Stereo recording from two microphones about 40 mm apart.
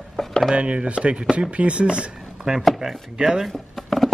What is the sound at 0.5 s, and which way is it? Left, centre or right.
Speech, right.